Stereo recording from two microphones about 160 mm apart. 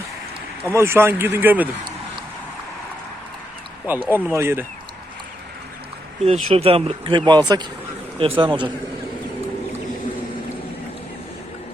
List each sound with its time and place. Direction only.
0.7 s speech: 15° right (ahead or behind)
3.9 s speech: 10° right (ahead or behind)
6.2 s speech: 40° right (ahead or behind)